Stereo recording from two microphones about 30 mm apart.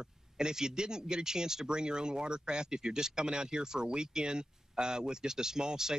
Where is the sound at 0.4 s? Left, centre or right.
Right.